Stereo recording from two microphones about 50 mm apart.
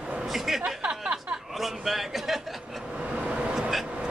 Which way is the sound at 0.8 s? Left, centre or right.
Centre.